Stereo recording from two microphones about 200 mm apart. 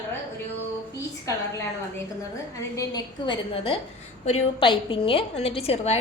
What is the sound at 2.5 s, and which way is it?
A woman's voice, 15° left (ahead or behind).